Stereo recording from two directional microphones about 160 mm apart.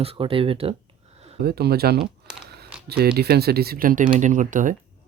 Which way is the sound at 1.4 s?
75° right (ahead or behind).